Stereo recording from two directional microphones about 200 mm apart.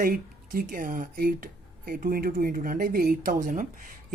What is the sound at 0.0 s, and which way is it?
Speech, 45° right (ahead or behind).